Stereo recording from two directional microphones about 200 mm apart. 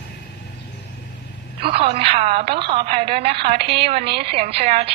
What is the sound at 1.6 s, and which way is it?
A woman's voice, 25° right (ahead or behind).